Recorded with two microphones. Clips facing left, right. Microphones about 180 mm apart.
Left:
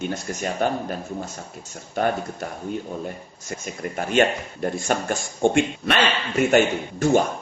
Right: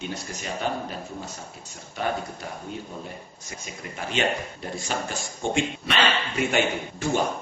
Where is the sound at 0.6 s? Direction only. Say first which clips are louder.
Left 5 dB; 50° left (ahead or behind).